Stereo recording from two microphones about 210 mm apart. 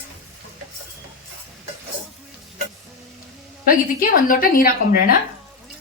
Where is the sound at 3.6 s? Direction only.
40° left (ahead or behind).